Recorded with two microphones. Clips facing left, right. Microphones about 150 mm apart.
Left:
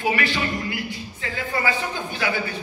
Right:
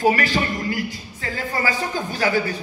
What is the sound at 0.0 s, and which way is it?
Speech, 40° right (ahead or behind).